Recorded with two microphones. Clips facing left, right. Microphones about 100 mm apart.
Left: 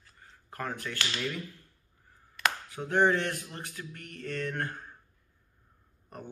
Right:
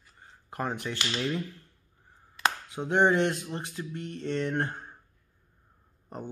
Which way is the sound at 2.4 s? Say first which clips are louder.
Right 2 dB; 20° right (ahead or behind).